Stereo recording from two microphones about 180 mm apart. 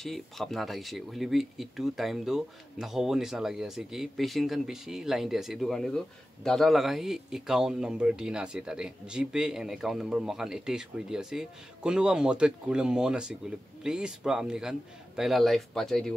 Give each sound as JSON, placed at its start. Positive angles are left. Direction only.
{"t": 0.0, "sound": "speech", "side_deg": 0}